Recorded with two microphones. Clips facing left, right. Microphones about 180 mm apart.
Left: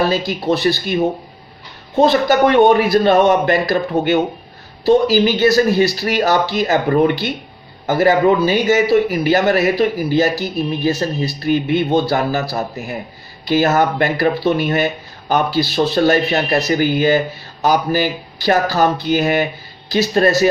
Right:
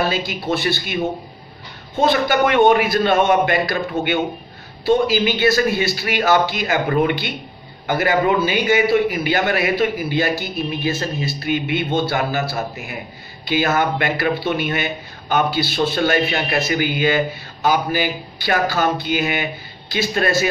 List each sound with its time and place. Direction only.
0.1 s speech: 40° left (ahead or behind)
2.0 s speech: 40° left (ahead or behind)
5.0 s speech: 40° left (ahead or behind)